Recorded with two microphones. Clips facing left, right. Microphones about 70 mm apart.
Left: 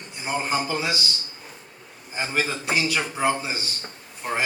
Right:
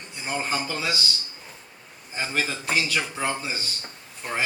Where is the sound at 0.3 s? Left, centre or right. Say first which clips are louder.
Left 3 dB; centre.